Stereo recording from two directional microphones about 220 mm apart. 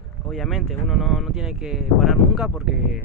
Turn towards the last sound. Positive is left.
turn(degrees=-5)  # may be behind; listen again after turning